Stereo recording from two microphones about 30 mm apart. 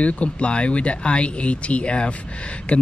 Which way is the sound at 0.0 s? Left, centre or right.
Left.